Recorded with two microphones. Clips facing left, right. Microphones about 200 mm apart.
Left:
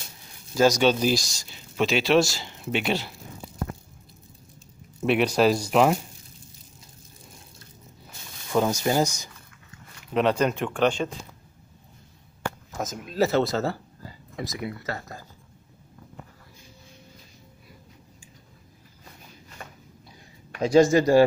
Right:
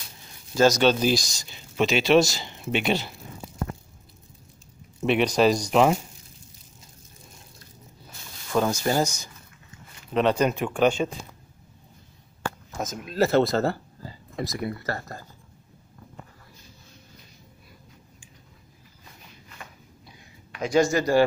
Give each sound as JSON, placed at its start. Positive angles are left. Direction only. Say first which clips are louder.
{"t": 0.6, "sound": "speech", "louder": "right 1 dB", "side_deg": 5}
{"t": 5.0, "sound": "speech", "louder": "even", "side_deg": 5}
{"t": 8.5, "sound": "speech", "louder": "even", "side_deg": 15}
{"t": 10.1, "sound": "speech", "louder": "right 1 dB", "side_deg": 0}
{"t": 12.7, "sound": "speech", "louder": "right 1 dB", "side_deg": 0}
{"t": 20.5, "sound": "speech", "louder": "left 4 dB", "side_deg": 30}